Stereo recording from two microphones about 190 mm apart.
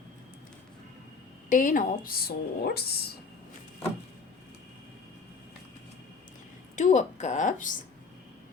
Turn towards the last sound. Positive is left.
turn(degrees=40)  # may be behind; listen again after turning